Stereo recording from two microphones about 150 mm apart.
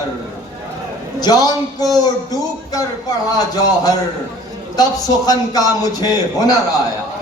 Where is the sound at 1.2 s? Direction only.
25° left (ahead or behind).